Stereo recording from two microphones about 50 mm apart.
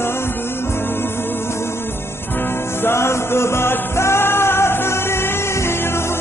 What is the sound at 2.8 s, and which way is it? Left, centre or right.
Music, left.